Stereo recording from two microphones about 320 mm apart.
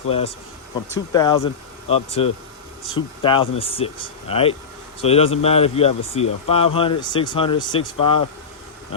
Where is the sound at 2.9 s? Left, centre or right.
Centre.